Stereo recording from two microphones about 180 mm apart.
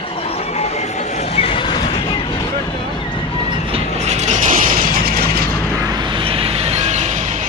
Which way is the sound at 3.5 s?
30° right (ahead or behind).